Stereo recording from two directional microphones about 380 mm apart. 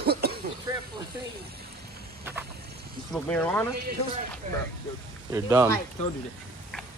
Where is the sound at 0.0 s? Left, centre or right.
Right.